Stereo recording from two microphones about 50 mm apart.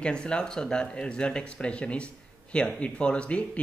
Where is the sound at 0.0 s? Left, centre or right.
Centre.